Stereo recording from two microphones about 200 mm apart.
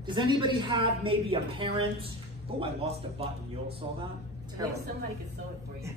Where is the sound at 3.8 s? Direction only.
20° right (ahead or behind).